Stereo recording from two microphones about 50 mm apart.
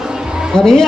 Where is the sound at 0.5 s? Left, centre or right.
Centre.